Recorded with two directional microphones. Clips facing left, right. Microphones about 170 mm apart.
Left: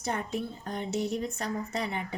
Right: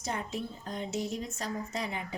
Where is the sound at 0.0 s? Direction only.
60° left (ahead or behind).